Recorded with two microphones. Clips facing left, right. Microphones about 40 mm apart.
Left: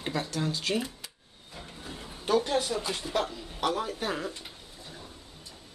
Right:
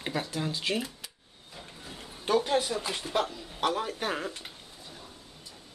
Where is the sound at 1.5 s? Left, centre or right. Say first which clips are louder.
Left 2 dB; centre.